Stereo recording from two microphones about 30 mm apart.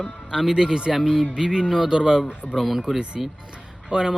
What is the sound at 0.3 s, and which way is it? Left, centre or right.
Speech, centre.